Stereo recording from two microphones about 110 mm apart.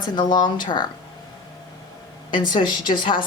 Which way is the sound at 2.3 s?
45° left (ahead or behind).